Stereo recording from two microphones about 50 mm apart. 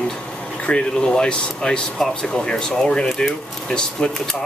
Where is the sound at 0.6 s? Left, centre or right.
Centre.